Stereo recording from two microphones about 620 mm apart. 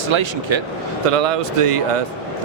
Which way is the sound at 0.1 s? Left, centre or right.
Right.